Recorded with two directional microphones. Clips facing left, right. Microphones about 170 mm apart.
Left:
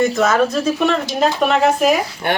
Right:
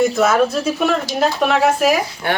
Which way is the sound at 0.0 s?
5° right (ahead or behind).